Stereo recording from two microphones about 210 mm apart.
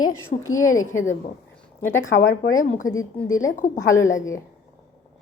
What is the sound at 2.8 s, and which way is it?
A woman's voice, 15° left (ahead or behind).